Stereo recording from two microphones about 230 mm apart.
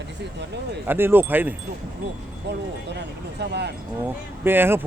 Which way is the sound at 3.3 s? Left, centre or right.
Right.